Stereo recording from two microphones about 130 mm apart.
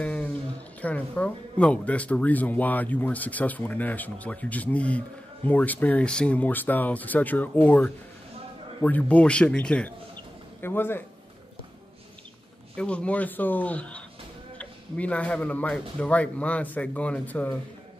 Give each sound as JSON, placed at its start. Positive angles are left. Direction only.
{"t": 0.0, "sound": "a sound", "side_deg": 10}
{"t": 0.7, "sound": "speech", "side_deg": 10}
{"t": 12.7, "sound": "speech", "side_deg": 10}